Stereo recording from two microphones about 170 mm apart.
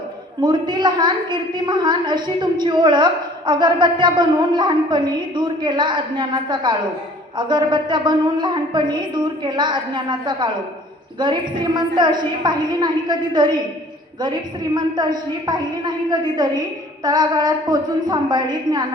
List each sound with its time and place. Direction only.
0.4 s a woman's voice: 25° right (ahead or behind)